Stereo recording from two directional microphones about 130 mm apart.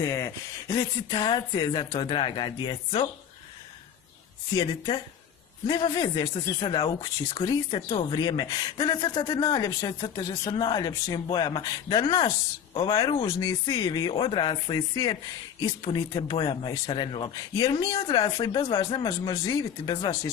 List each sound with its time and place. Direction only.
0.0 s speech: 25° left (ahead or behind)
4.5 s speech: 35° left (ahead or behind)
7.7 s speech: 50° left (ahead or behind)
8.1 s speech: 35° left (ahead or behind)
19.2 s speech: 30° left (ahead or behind)